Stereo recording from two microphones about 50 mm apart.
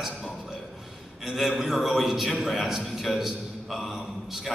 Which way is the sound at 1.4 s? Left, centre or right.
Centre.